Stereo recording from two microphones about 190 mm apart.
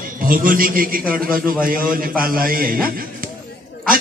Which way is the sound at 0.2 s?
50° right (ahead or behind).